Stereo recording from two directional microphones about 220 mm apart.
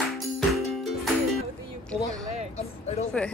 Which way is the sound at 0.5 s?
Centre (ahead or behind).